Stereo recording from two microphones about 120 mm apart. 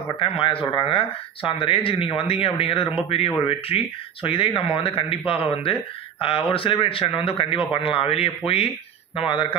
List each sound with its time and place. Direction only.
0.2 s speech: 50° left (ahead or behind)